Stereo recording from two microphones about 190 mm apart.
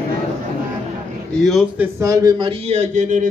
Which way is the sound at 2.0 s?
20° right (ahead or behind).